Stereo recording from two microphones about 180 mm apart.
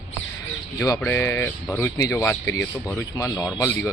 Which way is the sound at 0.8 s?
15° left (ahead or behind).